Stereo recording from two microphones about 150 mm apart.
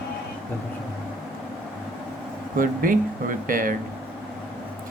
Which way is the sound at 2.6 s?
65° right (ahead or behind).